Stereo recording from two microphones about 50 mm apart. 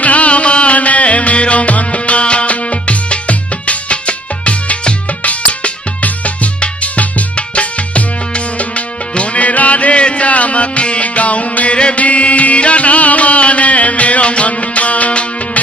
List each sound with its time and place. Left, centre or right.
0.0 s music: left